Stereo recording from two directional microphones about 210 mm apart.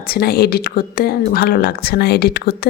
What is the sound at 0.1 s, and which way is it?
Speech, 45° left (ahead or behind).